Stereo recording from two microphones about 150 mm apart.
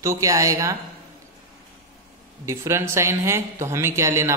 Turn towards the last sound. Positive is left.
turn(degrees=-20)  # may be behind; listen again after turning